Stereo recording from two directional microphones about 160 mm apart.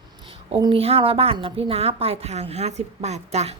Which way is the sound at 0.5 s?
35° right (ahead or behind).